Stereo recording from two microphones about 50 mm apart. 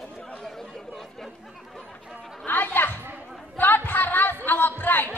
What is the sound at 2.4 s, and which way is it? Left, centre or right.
Music, left.